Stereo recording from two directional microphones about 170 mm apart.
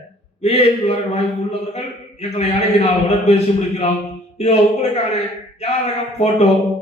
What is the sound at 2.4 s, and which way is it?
A man's voice, 40° left (ahead or behind).